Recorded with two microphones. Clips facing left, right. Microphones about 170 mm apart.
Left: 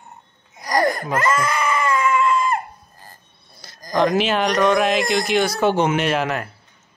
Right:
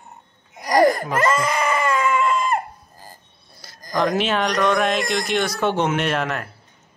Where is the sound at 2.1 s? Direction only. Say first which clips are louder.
Left 1 dB; 20° right (ahead or behind).